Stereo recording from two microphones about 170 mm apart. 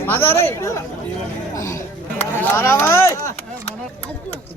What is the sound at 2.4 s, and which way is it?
Speech, 15° left (ahead or behind).